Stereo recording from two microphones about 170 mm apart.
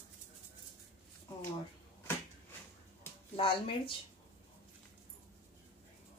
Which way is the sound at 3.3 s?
30° left (ahead or behind).